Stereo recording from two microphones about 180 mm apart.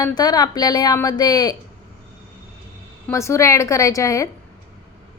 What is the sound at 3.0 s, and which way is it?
A woman's voice, 15° left (ahead or behind).